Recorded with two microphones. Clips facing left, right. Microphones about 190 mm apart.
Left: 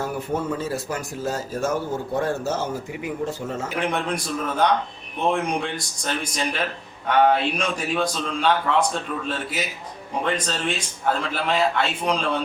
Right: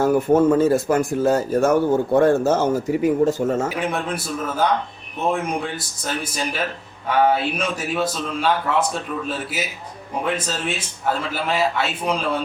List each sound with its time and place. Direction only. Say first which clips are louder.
0.0 s speech: right 11 dB; 50° right (ahead or behind)
3.8 s speech: right 1 dB; 5° right (ahead or behind)